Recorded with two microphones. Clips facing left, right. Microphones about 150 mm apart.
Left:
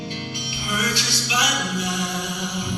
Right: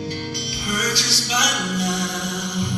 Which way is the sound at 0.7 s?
40° right (ahead or behind).